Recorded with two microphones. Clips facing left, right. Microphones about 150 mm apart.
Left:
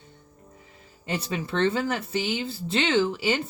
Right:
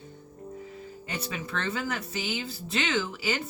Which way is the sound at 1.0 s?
30° left (ahead or behind).